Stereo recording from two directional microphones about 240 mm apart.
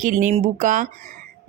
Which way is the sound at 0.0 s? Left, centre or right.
Right.